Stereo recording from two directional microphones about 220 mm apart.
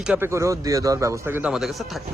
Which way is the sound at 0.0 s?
5° right (ahead or behind).